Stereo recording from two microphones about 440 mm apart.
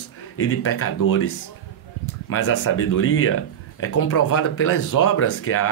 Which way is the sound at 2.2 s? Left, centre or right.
Left.